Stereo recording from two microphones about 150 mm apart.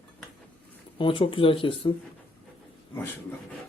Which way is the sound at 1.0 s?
35° left (ahead or behind).